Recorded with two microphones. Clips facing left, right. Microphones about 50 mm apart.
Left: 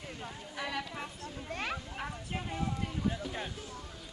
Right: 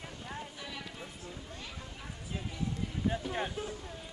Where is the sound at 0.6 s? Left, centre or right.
Left.